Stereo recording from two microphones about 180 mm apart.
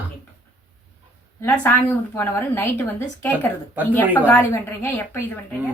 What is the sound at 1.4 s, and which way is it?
A woman's voice, 15° left (ahead or behind).